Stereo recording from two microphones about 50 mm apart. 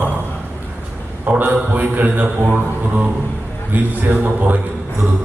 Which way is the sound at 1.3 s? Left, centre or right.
Right.